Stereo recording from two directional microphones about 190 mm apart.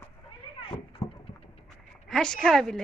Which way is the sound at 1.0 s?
25° left (ahead or behind).